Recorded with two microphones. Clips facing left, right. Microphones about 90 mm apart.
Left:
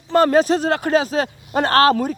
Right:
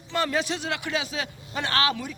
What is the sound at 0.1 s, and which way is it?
A man's voice, 45° left (ahead or behind).